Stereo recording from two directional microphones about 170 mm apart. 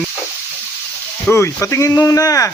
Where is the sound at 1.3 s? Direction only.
10° left (ahead or behind).